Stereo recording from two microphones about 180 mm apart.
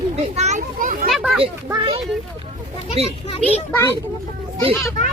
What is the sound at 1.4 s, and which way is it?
Speech, 30° right (ahead or behind).